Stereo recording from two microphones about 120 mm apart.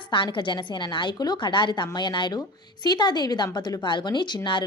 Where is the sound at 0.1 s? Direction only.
40° left (ahead or behind).